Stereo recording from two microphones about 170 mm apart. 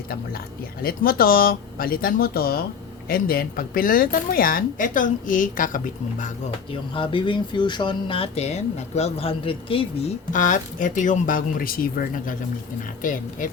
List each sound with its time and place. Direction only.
0.8 s a woman's voice: 60° left (ahead or behind)
6.9 s speech: 30° left (ahead or behind)
10.3 s speech: 50° left (ahead or behind)